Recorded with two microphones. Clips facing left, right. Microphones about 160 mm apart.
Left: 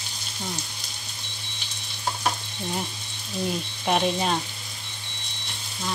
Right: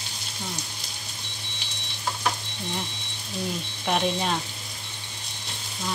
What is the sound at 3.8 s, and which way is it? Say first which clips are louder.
Speech: left 2 dB; 5° left (ahead or behind).